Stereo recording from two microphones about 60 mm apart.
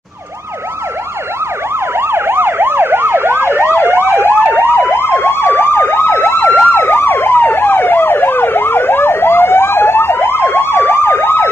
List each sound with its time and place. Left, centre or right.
2.0 s emergency vehicle: right
3.7 s emergency vehicle: left